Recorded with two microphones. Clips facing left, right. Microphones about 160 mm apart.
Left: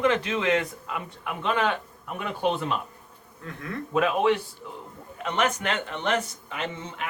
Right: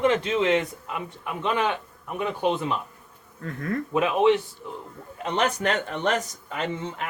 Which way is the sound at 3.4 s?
45° right (ahead or behind).